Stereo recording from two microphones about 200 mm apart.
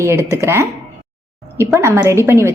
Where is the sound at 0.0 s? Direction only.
15° right (ahead or behind).